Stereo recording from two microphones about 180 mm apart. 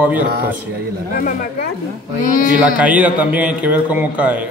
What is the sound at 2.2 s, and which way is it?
Speech, 50° left (ahead or behind).